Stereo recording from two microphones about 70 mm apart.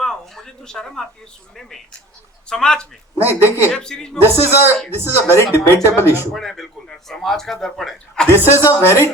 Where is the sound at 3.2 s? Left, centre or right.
Left.